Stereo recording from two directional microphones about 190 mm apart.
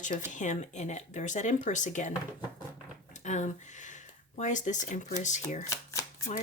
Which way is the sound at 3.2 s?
40° left (ahead or behind).